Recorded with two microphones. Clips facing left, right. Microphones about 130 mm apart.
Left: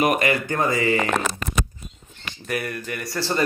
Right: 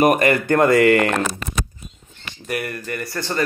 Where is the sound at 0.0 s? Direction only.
45° right (ahead or behind); by 1.1 s 65° right (ahead or behind).